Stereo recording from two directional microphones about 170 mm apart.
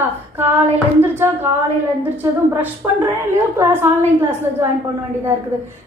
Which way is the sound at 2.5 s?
15° right (ahead or behind).